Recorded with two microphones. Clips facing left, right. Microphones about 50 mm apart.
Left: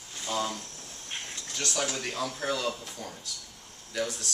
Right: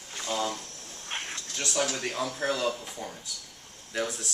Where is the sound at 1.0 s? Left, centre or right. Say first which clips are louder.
Right 4 dB; right.